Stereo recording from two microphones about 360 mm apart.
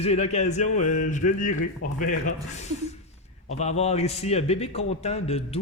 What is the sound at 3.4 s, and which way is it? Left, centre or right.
A man's voice, centre.